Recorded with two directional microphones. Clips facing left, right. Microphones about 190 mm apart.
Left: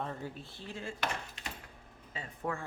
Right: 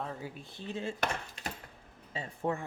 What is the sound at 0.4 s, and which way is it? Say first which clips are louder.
Speech: right 5 dB; 20° right (ahead or behind).